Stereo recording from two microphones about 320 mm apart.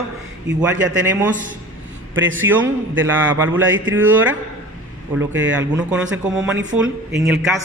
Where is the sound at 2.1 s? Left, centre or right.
Right.